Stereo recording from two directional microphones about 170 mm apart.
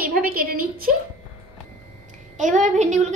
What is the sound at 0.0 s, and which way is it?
Speech, 60° right (ahead or behind).